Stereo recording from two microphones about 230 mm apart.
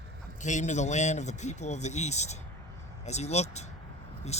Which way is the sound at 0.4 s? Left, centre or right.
Left.